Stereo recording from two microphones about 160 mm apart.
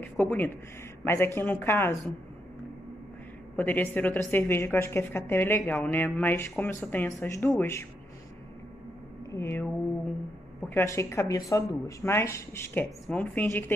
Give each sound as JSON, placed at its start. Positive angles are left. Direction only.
{"t": 0.0, "sound": "speech", "side_deg": 10}
{"t": 3.5, "sound": "speech", "side_deg": 10}
{"t": 9.3, "sound": "speech", "side_deg": 15}
{"t": 10.7, "sound": "speech", "side_deg": 15}